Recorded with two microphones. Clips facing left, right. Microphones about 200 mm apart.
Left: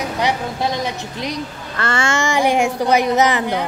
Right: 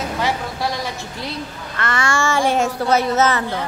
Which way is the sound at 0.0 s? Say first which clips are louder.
Left 2 dB; 20° left (ahead or behind).